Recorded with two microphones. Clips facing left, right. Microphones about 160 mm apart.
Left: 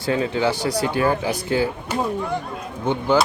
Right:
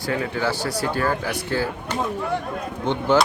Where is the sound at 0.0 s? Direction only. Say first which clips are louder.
Left 3 dB; 25° left (ahead or behind).